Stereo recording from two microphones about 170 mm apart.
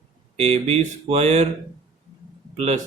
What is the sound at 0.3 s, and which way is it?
Speech, 40° right (ahead or behind).